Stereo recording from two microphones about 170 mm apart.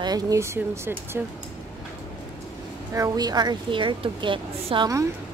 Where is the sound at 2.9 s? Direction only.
25° right (ahead or behind).